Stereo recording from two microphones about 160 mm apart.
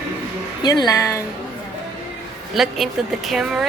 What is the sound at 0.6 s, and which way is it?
Speech, 25° left (ahead or behind).